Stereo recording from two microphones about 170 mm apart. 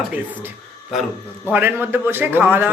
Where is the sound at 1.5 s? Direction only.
10° right (ahead or behind).